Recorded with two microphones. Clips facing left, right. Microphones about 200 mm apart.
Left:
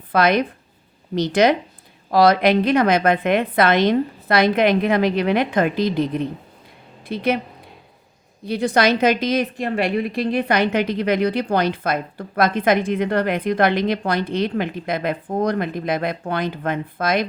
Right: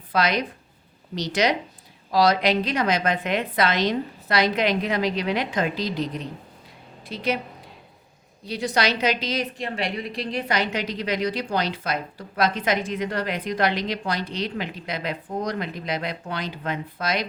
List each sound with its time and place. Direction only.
0.1 s a woman's voice: 55° left (ahead or behind)
8.4 s a woman's voice: 55° left (ahead or behind)